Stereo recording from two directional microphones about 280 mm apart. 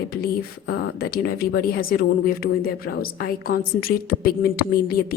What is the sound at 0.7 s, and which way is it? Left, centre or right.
Speech, left.